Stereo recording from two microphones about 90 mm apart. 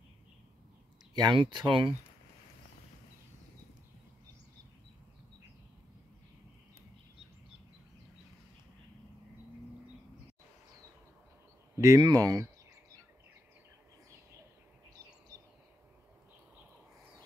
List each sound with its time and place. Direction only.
1.1 s speech: 60° right (ahead or behind)
11.7 s a sound: 35° right (ahead or behind)
12.0 s speech: 45° right (ahead or behind)